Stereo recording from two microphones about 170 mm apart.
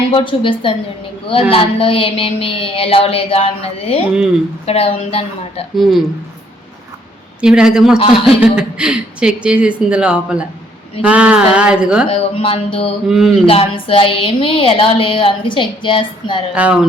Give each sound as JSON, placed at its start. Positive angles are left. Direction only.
{"t": 0.1, "sound": "a woman's voice", "side_deg": 30}
{"t": 5.7, "sound": "speech", "side_deg": 0}
{"t": 7.4, "sound": "speech", "side_deg": -5}
{"t": 12.0, "sound": "a woman's voice", "side_deg": 35}
{"t": 13.1, "sound": "speech", "side_deg": -5}
{"t": 13.4, "sound": "a woman's voice", "side_deg": 35}
{"t": 16.6, "sound": "speech", "side_deg": -10}